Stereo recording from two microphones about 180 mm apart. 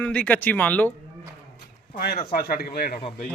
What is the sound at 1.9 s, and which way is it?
A man's voice, 55° left (ahead or behind).